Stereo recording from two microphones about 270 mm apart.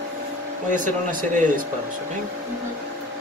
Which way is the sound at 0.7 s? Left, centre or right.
Right.